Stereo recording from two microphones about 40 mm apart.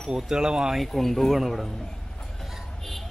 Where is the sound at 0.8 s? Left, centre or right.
Centre.